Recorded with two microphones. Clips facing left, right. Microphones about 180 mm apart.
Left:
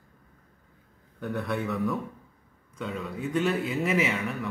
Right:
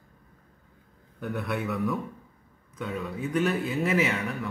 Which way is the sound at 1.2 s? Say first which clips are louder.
Left 1 dB; 5° right (ahead or behind).